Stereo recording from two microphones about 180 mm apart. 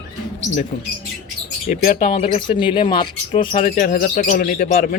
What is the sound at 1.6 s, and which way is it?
Speech, 45° left (ahead or behind).